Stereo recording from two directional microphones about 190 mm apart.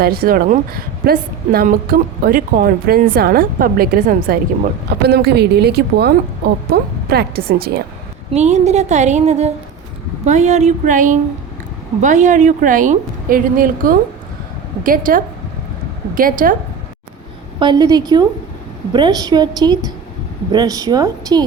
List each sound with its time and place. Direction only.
0.0 s a woman's voice: 50° right (ahead or behind)
5.0 s a woman's voice: 60° right (ahead or behind)
8.3 s a woman's voice: 35° right (ahead or behind)
17.6 s a woman's voice: 20° right (ahead or behind)